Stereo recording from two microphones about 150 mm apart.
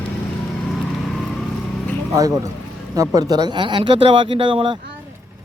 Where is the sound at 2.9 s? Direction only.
25° right (ahead or behind).